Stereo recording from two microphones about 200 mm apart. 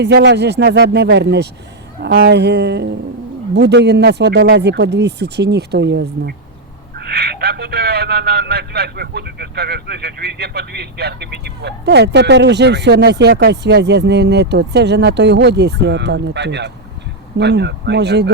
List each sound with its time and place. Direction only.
0.0 s speech: 55° right (ahead or behind)